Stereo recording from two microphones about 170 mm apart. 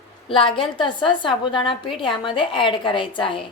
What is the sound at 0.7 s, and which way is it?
A woman's voice, 30° left (ahead or behind).